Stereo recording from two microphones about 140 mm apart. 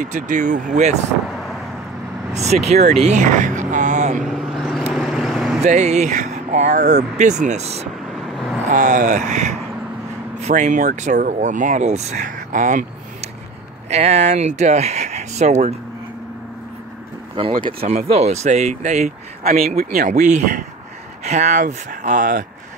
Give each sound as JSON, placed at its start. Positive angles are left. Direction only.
{"t": 0.0, "sound": "speech", "side_deg": -65}
{"t": 2.3, "sound": "speech", "side_deg": -50}
{"t": 4.2, "sound": "vehicle", "side_deg": 0}
{"t": 5.6, "sound": "speech", "side_deg": -55}
{"t": 8.1, "sound": "vehicle", "side_deg": 0}
{"t": 8.6, "sound": "speech", "side_deg": -60}
{"t": 13.8, "sound": "speech", "side_deg": -50}
{"t": 17.8, "sound": "speech", "side_deg": -50}
{"t": 19.8, "sound": "speech", "side_deg": -65}
{"t": 21.2, "sound": "speech", "side_deg": -55}